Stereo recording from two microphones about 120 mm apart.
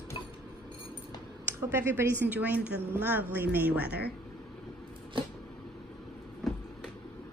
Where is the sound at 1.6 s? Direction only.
20° right (ahead or behind).